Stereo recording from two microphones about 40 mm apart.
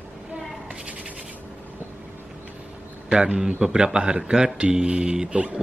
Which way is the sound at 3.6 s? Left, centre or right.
Centre.